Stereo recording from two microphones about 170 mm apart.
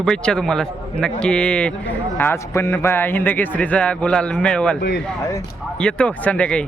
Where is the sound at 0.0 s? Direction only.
5° left (ahead or behind).